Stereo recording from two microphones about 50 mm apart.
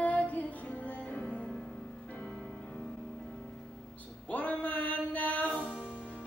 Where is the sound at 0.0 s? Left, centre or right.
Left.